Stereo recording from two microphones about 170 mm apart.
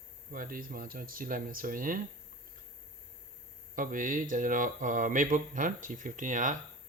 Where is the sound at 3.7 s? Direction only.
50° right (ahead or behind).